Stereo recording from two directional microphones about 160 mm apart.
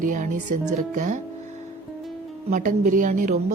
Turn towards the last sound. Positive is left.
turn(degrees=-50)  # may be behind; listen again after turning